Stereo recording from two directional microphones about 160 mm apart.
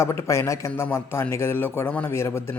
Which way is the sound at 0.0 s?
15° left (ahead or behind).